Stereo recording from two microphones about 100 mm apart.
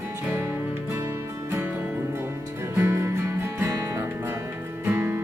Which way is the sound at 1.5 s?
25° right (ahead or behind).